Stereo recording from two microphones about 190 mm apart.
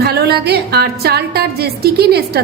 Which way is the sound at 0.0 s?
55° right (ahead or behind).